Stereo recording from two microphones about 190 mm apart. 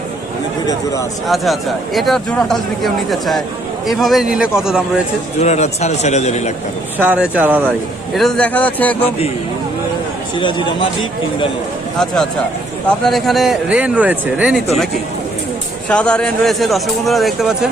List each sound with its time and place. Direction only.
0.7 s speech: 15° left (ahead or behind)
1.3 s speech: centre (ahead or behind)
5.4 s speech: 35° left (ahead or behind)
7.0 s speech: 10° right (ahead or behind)
8.1 s speech: centre (ahead or behind)
10.4 s speech: 25° left (ahead or behind)
11.9 s speech: 5° left (ahead or behind)
15.9 s speech: 5° left (ahead or behind)